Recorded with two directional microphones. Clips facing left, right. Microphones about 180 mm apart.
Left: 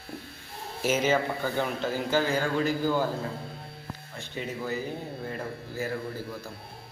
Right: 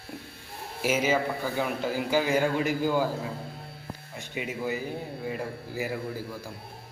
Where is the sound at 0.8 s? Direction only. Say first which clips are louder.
Even; 10° right (ahead or behind).